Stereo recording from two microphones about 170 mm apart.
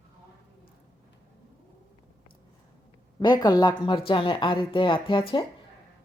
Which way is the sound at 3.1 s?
25° left (ahead or behind).